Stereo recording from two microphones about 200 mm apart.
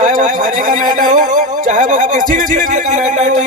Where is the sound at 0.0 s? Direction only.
40° right (ahead or behind).